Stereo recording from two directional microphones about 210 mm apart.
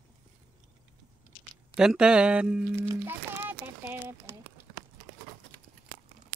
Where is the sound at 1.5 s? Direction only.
Centre (ahead or behind).